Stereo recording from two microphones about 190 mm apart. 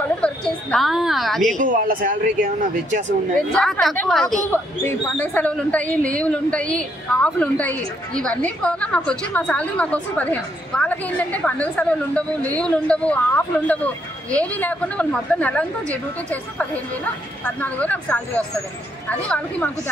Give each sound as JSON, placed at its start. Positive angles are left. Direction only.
{"t": 0.2, "sound": "a woman's voice", "side_deg": 5}
{"t": 1.6, "sound": "speech", "side_deg": -45}
{"t": 3.5, "sound": "a woman's voice", "side_deg": 5}